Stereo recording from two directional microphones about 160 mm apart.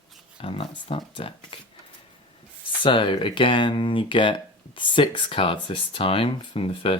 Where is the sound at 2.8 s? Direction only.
30° left (ahead or behind).